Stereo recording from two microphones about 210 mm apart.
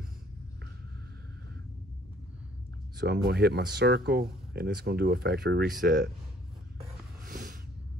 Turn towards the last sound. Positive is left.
turn(degrees=-45)  # may be behind; listen again after turning